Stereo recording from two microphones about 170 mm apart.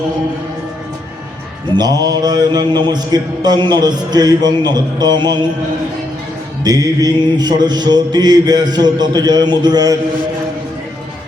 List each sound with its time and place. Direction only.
1.7 s mantra: 25° right (ahead or behind)
6.7 s mantra: 20° right (ahead or behind)